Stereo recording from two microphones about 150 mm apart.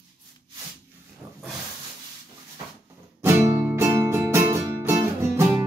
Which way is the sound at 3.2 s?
15° right (ahead or behind).